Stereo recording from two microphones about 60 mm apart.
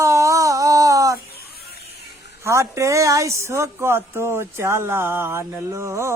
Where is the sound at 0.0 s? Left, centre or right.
Right.